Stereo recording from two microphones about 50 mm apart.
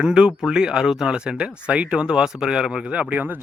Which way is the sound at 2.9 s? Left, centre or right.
Right.